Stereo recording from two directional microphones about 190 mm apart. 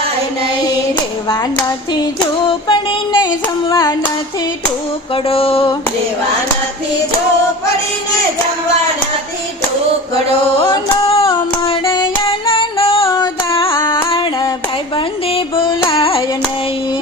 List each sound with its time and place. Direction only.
1.3 s music: 20° left (ahead or behind)
2.5 s female singing: 25° left (ahead or behind)
5.1 s music: 30° left (ahead or behind)
10.6 s music: 30° left (ahead or behind)
11.9 s female singing: 25° left (ahead or behind)
13.1 s music: 15° left (ahead or behind)
13.7 s a sound: 20° left (ahead or behind)
14.9 s music: 25° left (ahead or behind)
15.9 s carnatic music: 30° left (ahead or behind)